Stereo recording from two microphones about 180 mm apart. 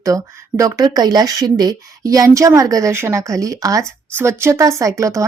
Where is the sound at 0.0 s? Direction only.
20° right (ahead or behind).